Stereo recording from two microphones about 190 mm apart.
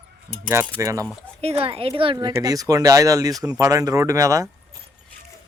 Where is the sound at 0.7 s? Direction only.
15° right (ahead or behind).